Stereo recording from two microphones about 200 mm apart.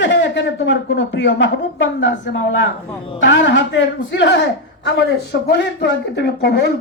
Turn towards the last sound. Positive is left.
turn(degrees=55)  # may be behind; listen again after turning